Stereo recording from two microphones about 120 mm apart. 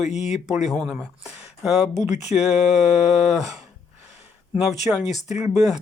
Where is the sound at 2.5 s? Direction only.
65° left (ahead or behind).